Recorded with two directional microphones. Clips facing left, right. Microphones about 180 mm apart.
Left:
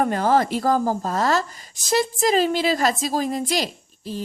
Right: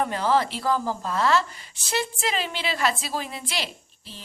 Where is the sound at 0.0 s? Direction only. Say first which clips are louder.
Left 4 dB; 50° left (ahead or behind).